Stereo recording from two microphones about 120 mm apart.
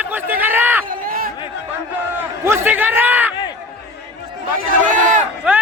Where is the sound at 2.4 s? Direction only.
15° right (ahead or behind).